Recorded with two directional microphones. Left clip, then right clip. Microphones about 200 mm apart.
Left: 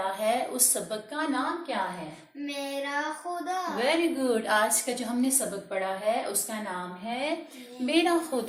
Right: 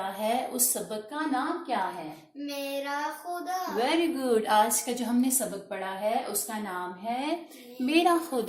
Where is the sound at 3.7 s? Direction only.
40° right (ahead or behind).